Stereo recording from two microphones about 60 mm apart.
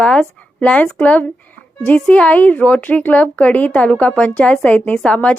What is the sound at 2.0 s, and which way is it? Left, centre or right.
A woman's voice, left.